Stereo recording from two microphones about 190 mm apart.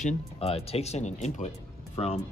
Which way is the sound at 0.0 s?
30° left (ahead or behind).